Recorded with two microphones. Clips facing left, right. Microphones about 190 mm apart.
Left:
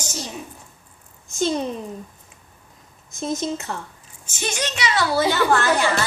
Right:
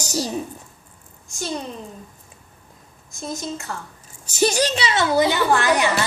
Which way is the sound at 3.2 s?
20° left (ahead or behind).